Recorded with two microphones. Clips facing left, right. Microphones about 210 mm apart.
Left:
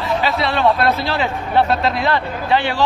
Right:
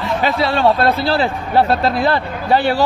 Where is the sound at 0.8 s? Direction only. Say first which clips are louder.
Right 3 dB; 30° right (ahead or behind).